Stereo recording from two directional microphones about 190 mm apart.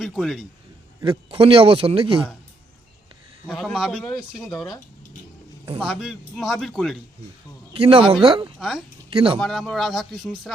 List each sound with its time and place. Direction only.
0.0 s speech: centre (ahead or behind)
1.0 s a man's voice: 30° right (ahead or behind)
3.4 s speech: centre (ahead or behind)
4.4 s speech: 20° left (ahead or behind)
5.8 s speech: 5° right (ahead or behind)
7.7 s a man's voice: 30° right (ahead or behind)
8.5 s speech: centre (ahead or behind)
9.0 s speech: 25° right (ahead or behind)
9.4 s speech: centre (ahead or behind)